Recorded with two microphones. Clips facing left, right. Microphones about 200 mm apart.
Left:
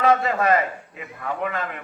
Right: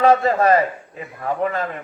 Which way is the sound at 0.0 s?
35° right (ahead or behind).